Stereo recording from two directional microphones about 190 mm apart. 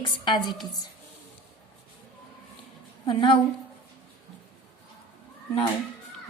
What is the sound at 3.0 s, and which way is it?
Speech, 25° left (ahead or behind).